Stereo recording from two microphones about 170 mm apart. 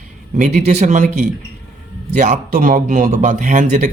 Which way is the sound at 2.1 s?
45° right (ahead or behind).